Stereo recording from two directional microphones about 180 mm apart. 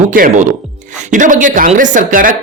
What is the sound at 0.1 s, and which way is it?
Speech, 45° right (ahead or behind).